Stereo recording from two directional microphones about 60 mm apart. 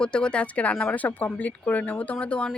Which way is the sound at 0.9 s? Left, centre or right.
Left.